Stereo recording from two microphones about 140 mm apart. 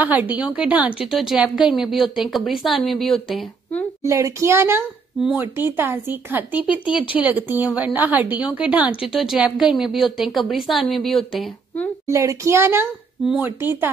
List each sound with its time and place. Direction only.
0.0 s a woman's voice: 10° right (ahead or behind)
4.0 s a woman's voice: 20° right (ahead or behind)
6.9 s speech: 40° left (ahead or behind)
7.2 s a woman's voice: 10° right (ahead or behind); by 11.9 s 5° left (ahead or behind)
12.1 s a woman's voice: 20° right (ahead or behind)